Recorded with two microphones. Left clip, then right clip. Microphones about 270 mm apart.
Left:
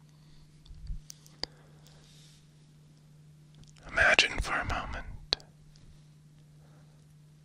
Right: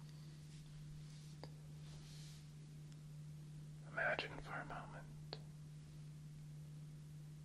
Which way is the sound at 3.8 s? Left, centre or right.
Left.